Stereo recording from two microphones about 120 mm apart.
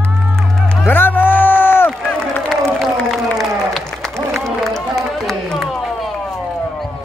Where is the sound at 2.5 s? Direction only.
Centre (ahead or behind).